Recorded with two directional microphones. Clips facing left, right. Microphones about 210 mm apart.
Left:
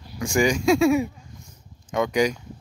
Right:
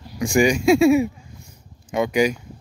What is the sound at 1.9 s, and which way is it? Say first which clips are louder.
Speech: right 2 dB; 10° right (ahead or behind).